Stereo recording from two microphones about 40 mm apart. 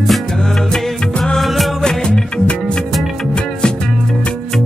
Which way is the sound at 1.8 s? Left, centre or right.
Centre.